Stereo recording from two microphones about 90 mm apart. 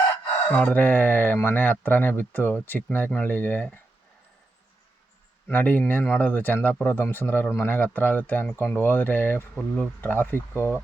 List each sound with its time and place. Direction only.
0.4 s speech: 20° left (ahead or behind)
5.5 s speech: 20° left (ahead or behind)